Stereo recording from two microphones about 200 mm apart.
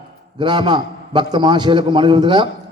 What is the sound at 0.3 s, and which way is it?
A man's voice, 25° right (ahead or behind).